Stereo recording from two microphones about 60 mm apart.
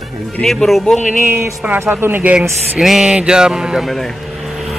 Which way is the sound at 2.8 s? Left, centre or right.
Centre.